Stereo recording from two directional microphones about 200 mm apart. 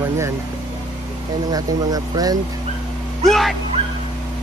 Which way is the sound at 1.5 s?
20° right (ahead or behind).